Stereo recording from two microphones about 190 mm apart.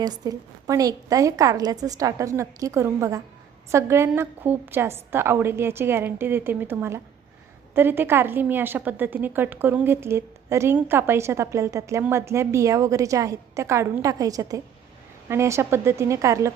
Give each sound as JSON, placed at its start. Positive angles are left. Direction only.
{"t": 0.0, "sound": "a woman's voice", "side_deg": -20}